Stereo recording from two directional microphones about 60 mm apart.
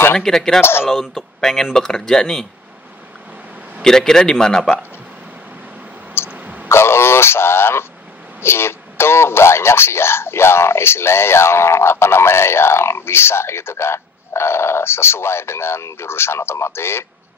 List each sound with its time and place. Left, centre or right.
0.2 s speech: centre
0.6 s speech: left
1.0 s speech: centre
3.8 s speech: centre
6.3 s a sound: right
6.7 s speech: left